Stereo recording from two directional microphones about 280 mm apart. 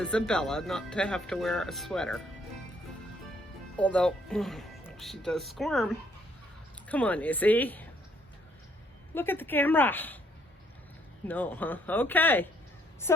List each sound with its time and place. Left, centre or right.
0.0 s speech: centre
3.8 s speech: centre
9.1 s speech: centre
11.3 s speech: centre